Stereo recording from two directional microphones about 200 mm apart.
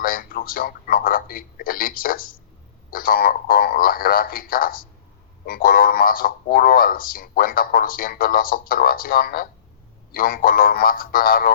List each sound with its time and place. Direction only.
0.0 s a man's voice: 45° left (ahead or behind)